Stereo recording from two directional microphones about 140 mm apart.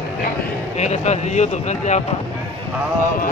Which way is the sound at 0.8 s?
55° left (ahead or behind).